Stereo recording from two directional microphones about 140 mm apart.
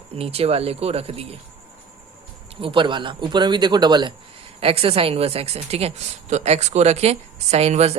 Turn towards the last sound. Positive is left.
turn(degrees=-50)  # may be behind; listen again after turning